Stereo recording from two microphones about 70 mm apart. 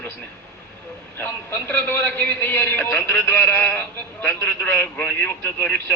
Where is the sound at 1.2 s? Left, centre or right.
Left.